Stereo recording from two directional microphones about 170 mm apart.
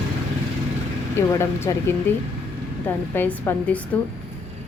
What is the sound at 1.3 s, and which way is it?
A woman's voice, 15° left (ahead or behind).